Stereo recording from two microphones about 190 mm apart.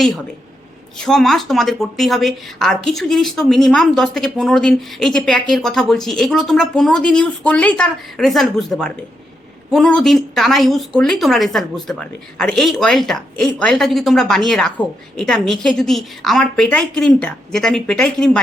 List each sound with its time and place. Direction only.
0.9 s speech: centre (ahead or behind)